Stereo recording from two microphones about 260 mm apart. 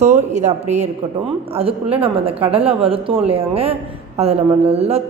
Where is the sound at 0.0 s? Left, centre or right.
Right.